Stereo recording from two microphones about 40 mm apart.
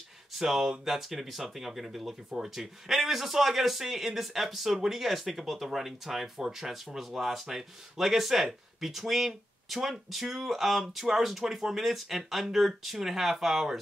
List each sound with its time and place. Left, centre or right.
0.4 s a man's voice: centre